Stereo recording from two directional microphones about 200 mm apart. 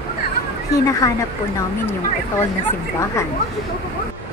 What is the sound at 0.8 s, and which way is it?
Speech, 15° left (ahead or behind).